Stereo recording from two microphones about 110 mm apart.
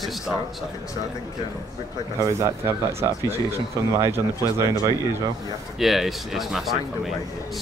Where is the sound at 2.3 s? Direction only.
25° right (ahead or behind).